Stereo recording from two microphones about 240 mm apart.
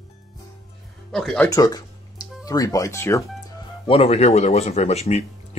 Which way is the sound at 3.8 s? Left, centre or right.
Left.